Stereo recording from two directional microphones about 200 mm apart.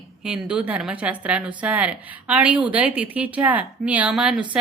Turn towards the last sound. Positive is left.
turn(degrees=-5)  # may be behind; listen again after turning